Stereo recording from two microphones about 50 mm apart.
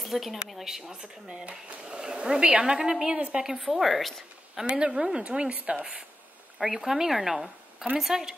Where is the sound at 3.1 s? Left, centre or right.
Right.